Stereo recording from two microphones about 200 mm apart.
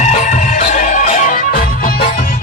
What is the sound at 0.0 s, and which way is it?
Music, 35° left (ahead or behind).